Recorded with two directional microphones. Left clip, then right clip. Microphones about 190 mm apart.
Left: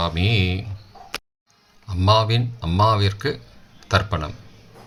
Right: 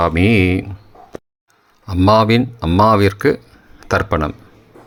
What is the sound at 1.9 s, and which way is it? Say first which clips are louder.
Speech: right 7 dB; 35° right (ahead or behind).